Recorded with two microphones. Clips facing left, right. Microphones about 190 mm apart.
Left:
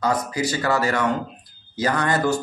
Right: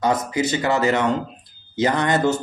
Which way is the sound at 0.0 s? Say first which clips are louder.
Right 2 dB; 20° right (ahead or behind).